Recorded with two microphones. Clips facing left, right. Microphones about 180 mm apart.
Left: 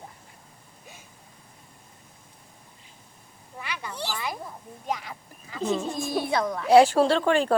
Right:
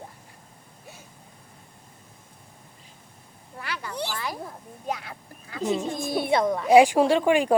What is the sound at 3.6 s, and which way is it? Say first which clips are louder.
Speech: right 2 dB; 15° left (ahead or behind).